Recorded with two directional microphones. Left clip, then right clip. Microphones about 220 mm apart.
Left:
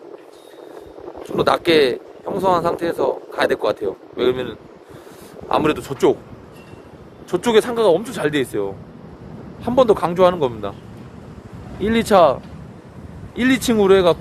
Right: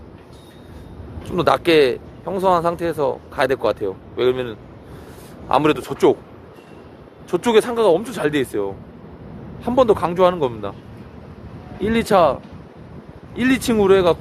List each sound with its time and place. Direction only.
1.2 s a man's voice: 15° right (ahead or behind)
7.3 s a man's voice: 10° right (ahead or behind)
11.8 s speech: centre (ahead or behind)